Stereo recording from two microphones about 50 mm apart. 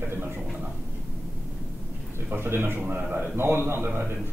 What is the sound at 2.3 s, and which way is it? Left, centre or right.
A man's voice, right.